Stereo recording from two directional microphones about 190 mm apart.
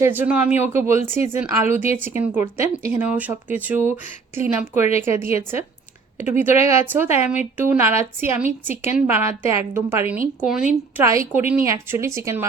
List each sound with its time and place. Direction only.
0.0 s a woman's voice: 10° right (ahead or behind)
10.9 s a woman's voice: 15° right (ahead or behind)